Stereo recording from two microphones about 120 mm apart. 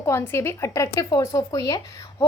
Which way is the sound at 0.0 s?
20° left (ahead or behind).